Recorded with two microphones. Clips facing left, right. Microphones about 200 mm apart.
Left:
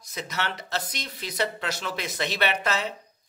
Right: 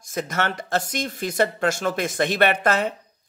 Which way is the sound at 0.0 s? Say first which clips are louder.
Right 7 dB; 50° right (ahead or behind).